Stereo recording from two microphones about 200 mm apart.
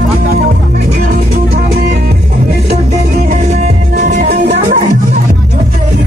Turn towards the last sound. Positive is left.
turn(degrees=-45)  # may be behind; listen again after turning